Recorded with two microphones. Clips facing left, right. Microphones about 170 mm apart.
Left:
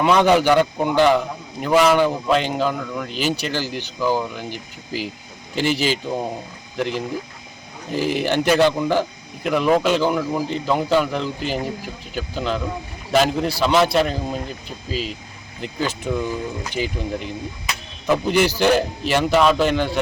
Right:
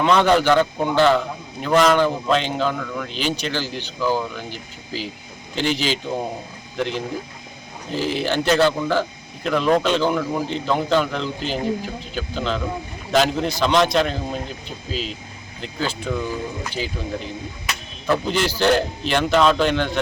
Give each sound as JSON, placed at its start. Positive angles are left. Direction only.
{"t": 0.0, "sound": "speech", "side_deg": 10}
{"t": 15.6, "sound": "speech", "side_deg": 15}